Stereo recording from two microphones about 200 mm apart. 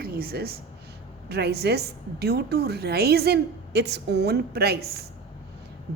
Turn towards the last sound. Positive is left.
turn(degrees=-50)  # may be behind; listen again after turning